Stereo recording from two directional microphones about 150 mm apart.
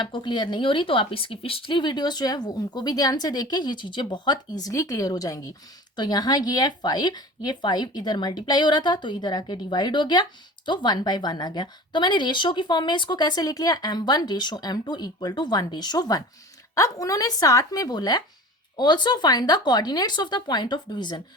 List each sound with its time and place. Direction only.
0.0 s a woman's voice: 30° left (ahead or behind)